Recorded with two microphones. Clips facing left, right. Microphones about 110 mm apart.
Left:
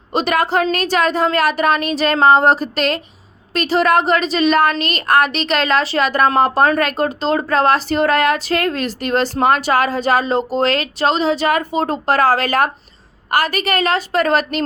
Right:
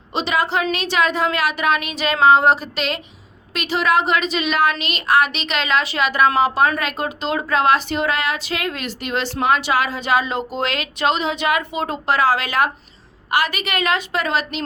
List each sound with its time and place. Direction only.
0.1 s a woman's voice: 50° left (ahead or behind)